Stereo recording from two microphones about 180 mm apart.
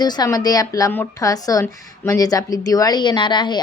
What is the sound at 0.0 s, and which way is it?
A woman's voice, 20° left (ahead or behind).